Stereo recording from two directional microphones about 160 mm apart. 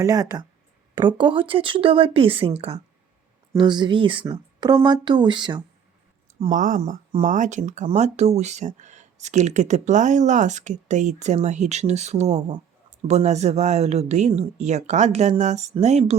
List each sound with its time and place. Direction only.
0.0 s a woman's voice: 20° right (ahead or behind)
6.5 s speech: 55° right (ahead or behind)